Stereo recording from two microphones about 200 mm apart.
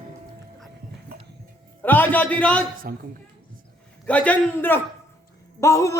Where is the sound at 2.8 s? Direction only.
45° right (ahead or behind).